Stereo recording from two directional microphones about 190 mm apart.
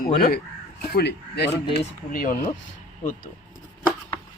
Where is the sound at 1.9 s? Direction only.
45° left (ahead or behind).